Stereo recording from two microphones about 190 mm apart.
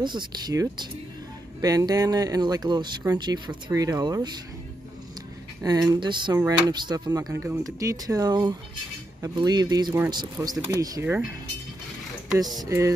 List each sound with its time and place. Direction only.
0.0 s speech: 20° right (ahead or behind)
5.6 s speech: 20° right (ahead or behind)
12.6 s a sound: 15° right (ahead or behind)